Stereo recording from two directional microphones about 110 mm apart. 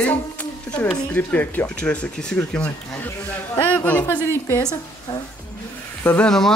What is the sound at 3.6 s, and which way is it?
Speech, 15° left (ahead or behind).